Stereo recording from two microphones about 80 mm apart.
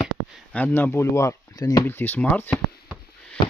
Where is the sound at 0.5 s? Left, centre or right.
Left.